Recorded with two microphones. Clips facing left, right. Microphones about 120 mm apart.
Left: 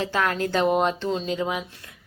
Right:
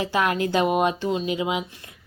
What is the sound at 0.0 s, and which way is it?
A woman's voice, 15° right (ahead or behind).